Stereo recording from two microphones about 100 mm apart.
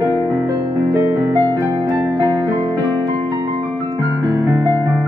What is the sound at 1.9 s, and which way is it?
Music, 35° right (ahead or behind).